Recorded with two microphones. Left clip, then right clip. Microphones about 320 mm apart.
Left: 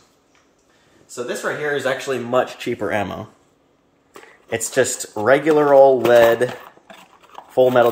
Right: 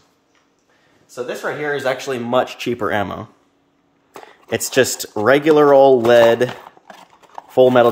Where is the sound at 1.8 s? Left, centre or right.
Centre.